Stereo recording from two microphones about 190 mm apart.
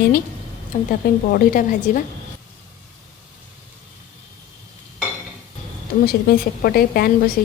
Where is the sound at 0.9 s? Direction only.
50° left (ahead or behind).